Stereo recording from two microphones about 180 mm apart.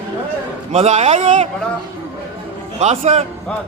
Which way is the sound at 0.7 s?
35° right (ahead or behind).